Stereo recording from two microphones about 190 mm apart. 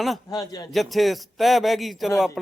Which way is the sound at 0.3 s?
20° left (ahead or behind).